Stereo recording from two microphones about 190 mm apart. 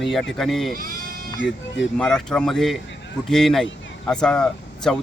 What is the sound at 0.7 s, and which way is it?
Speech, 50° right (ahead or behind).